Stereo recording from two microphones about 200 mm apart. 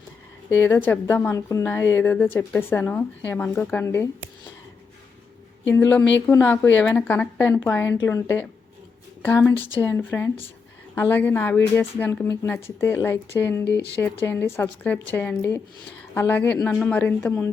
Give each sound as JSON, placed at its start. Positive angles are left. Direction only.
{"t": 0.6, "sound": "a woman's voice", "side_deg": 10}
{"t": 5.7, "sound": "a woman's voice", "side_deg": 15}
{"t": 9.2, "sound": "a woman's voice", "side_deg": 10}
{"t": 9.6, "sound": "speech", "side_deg": 25}
{"t": 9.8, "sound": "a woman's voice", "side_deg": 10}